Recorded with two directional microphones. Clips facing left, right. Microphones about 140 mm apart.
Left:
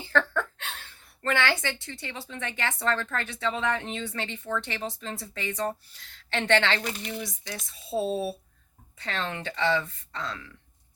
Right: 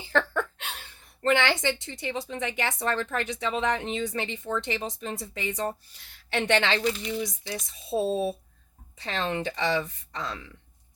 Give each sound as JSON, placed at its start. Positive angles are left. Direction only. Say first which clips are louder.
{"t": 0.0, "sound": "a woman's voice", "louder": "even", "side_deg": -15}